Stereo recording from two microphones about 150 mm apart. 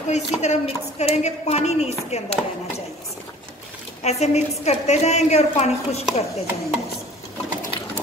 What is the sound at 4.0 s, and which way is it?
A woman's voice, 45° left (ahead or behind).